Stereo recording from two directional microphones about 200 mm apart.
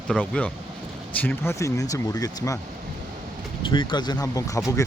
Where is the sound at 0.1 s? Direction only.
5° left (ahead or behind).